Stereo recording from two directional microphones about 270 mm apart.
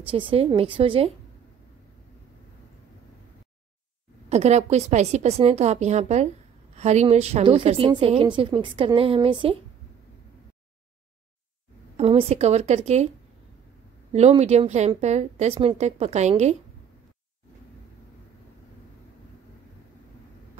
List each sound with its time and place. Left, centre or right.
0.0 s a woman's voice: centre
4.3 s a woman's voice: right
12.0 s a woman's voice: right
14.1 s a woman's voice: right